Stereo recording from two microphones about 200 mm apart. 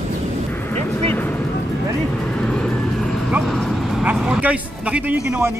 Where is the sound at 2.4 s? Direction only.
5° left (ahead or behind).